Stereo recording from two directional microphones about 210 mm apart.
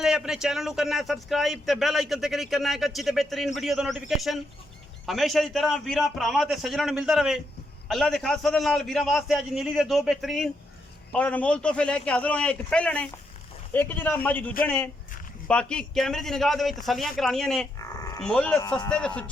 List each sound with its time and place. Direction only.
0.0 s a man's voice: 5° right (ahead or behind)
17.7 s livestock: 15° left (ahead or behind)
18.2 s a man's voice: 5° left (ahead or behind)